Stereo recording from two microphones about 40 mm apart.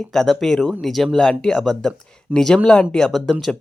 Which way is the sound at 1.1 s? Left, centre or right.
Centre.